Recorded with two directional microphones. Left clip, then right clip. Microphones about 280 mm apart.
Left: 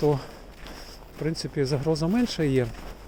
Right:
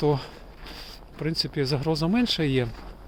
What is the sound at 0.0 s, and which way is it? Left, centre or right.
Speech, centre.